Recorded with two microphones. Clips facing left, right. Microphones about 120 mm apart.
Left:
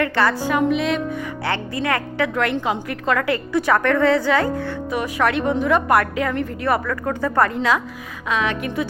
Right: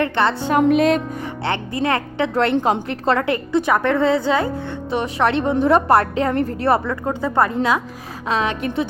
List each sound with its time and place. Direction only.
0.0 s a woman's voice: 25° right (ahead or behind)
0.5 s speech: 45° right (ahead or behind)
1.5 s a woman's voice: 25° right (ahead or behind)